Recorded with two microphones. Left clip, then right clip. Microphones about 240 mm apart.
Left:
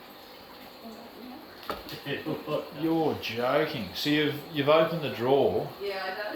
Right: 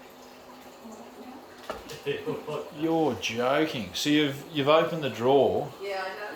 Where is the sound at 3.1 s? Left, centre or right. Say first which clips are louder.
Right 1 dB; centre.